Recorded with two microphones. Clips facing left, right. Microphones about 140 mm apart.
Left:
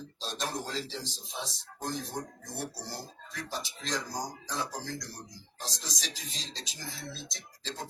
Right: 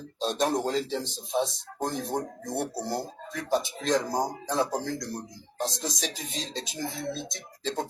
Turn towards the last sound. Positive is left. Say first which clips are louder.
# right 10 dB
turn(degrees=-55)  # may be behind; listen again after turning